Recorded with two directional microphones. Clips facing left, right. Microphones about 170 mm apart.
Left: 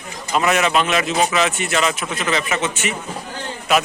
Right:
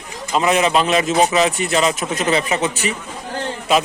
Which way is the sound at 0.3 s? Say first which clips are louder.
Right 2 dB; 30° right (ahead or behind).